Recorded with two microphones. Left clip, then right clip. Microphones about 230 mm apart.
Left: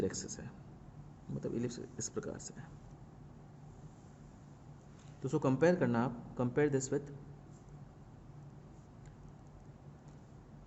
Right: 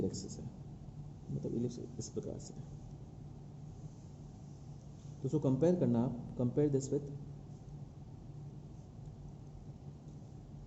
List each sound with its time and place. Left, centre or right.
0.0 s speech: left
1.5 s speech: left
5.2 s a man's voice: left